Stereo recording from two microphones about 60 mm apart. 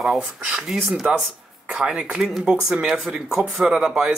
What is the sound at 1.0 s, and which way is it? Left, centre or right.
Speech, right.